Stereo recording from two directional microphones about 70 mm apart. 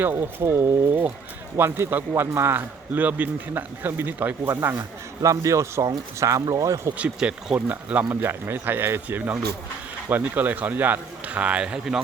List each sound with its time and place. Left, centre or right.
0.0 s a man's voice: right
5.2 s speech: right
6.9 s speech: centre
8.1 s a man's voice: right; by 12.0 s centre